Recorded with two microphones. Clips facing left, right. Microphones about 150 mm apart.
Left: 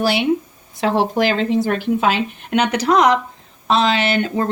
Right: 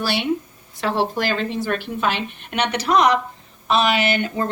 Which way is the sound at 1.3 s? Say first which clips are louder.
Left 5 dB; 90° left.